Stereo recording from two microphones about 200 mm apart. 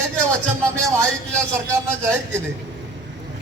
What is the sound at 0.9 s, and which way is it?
Speech, 15° right (ahead or behind).